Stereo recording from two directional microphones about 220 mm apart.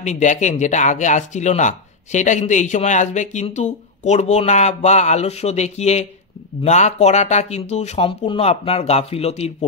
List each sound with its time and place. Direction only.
0.0 s speech: 35° left (ahead or behind)